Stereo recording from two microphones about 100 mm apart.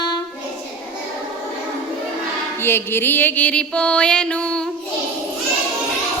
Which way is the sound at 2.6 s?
25° left (ahead or behind).